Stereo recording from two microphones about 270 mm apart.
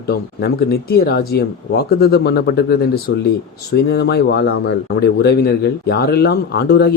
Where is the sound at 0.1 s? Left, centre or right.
Left.